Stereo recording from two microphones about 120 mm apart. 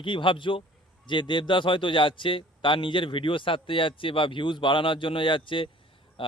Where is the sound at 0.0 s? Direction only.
45° left (ahead or behind).